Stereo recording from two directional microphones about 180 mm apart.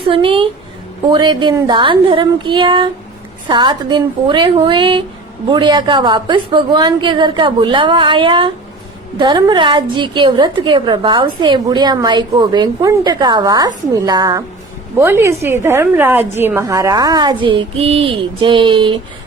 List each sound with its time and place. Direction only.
0.0 s a woman's voice: 25° right (ahead or behind)